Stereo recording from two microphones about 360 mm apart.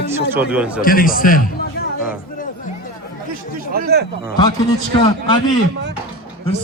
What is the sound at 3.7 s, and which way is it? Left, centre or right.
Speech, right.